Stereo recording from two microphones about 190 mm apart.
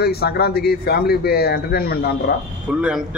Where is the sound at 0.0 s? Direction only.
55° left (ahead or behind).